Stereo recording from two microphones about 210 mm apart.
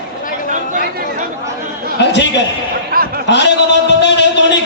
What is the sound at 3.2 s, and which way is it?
Speech, 55° left (ahead or behind).